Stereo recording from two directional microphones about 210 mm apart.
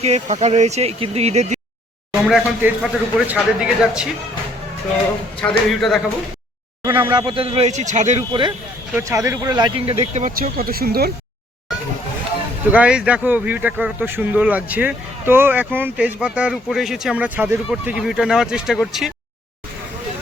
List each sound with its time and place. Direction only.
0.0 s speech: 30° right (ahead or behind)
2.2 s speech: 5° right (ahead or behind)
5.4 s speech: centre (ahead or behind)
6.8 s speech: 15° right (ahead or behind)
10.2 s speech: 40° right (ahead or behind)
12.7 s speech: 5° right (ahead or behind)